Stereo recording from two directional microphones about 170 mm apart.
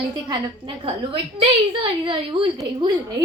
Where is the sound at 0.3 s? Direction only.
25° right (ahead or behind).